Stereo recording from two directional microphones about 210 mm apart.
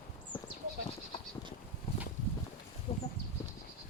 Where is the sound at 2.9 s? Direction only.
25° left (ahead or behind).